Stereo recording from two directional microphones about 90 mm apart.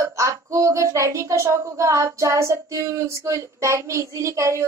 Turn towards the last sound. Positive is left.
turn(degrees=-35)  # may be behind; listen again after turning